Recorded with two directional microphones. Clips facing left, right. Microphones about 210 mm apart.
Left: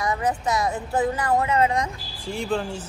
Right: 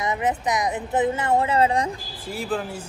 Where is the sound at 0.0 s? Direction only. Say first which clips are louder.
Even; 20° right (ahead or behind).